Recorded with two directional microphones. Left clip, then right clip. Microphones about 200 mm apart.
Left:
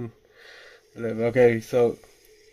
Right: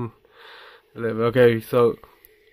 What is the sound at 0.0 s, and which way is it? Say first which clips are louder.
Speech: right 4 dB; 25° right (ahead or behind).